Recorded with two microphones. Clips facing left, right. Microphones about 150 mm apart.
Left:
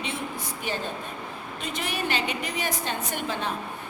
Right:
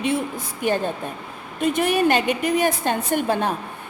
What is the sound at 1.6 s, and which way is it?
A woman's voice, 50° right (ahead or behind).